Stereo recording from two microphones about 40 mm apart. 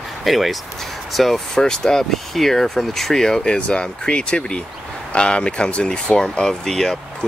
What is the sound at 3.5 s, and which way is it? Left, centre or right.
Speech, left.